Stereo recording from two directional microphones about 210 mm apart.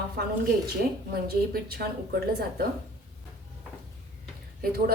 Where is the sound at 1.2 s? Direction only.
45° right (ahead or behind).